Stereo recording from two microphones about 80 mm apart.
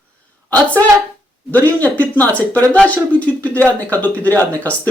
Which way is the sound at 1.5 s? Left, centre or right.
Left.